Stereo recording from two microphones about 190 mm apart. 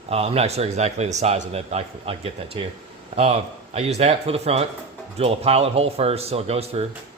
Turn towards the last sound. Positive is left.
turn(degrees=-30)  # may be behind; listen again after turning